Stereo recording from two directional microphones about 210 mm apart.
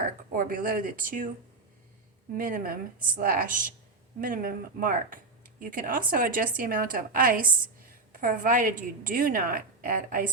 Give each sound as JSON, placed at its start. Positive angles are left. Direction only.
{"t": 0.0, "sound": "speech", "side_deg": -40}
{"t": 2.3, "sound": "speech", "side_deg": -40}